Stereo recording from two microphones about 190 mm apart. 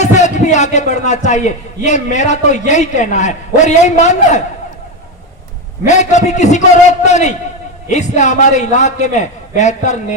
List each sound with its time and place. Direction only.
0.0 s a man's voice: 40° left (ahead or behind)
5.9 s a man's voice: 40° left (ahead or behind)